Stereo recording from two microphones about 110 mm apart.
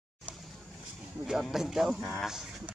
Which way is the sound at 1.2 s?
5° right (ahead or behind).